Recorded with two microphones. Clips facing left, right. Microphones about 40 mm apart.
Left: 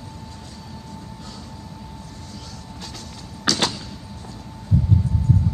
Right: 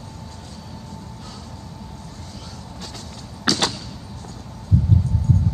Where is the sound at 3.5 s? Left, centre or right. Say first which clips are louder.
Left 1 dB; centre.